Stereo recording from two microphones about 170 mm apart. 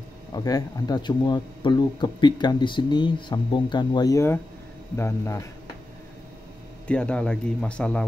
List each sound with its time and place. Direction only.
0.3 s a man's voice: 20° left (ahead or behind)
6.9 s speech: 5° left (ahead or behind)